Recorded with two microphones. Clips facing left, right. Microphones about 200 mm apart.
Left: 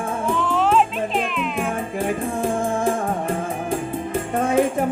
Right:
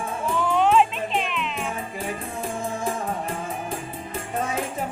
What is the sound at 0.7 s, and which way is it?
Music, centre (ahead or behind).